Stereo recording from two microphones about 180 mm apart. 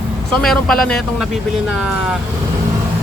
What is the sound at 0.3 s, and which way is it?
Speech, centre (ahead or behind).